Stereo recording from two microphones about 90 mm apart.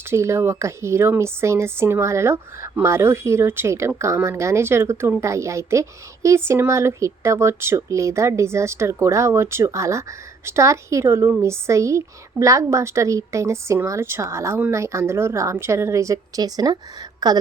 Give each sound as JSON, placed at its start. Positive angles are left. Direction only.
{"t": 0.1, "sound": "speech", "side_deg": -30}